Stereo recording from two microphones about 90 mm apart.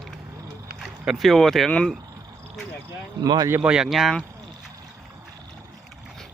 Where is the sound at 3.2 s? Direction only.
45° right (ahead or behind).